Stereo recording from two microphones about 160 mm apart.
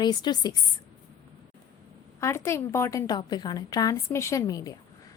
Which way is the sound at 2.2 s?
15° left (ahead or behind).